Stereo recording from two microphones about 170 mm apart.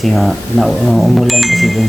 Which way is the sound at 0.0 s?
Centre (ahead or behind).